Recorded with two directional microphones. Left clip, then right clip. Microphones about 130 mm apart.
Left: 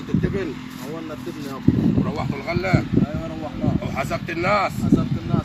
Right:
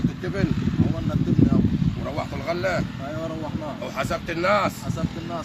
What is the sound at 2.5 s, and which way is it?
Speech, 15° right (ahead or behind).